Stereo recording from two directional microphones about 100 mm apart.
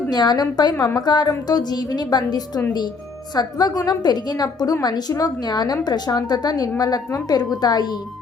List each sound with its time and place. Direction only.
0.1 s a woman's voice: 45° left (ahead or behind)